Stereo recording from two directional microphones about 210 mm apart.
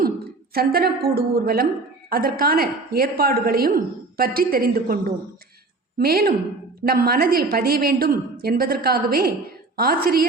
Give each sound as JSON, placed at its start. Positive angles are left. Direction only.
{"t": 0.5, "sound": "a woman's voice", "side_deg": -45}